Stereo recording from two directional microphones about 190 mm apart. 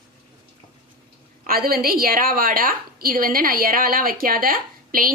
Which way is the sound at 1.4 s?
50° right (ahead or behind).